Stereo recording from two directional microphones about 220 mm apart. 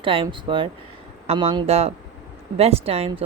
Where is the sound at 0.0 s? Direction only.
25° right (ahead or behind).